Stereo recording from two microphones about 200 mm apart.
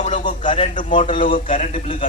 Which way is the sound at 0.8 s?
40° left (ahead or behind).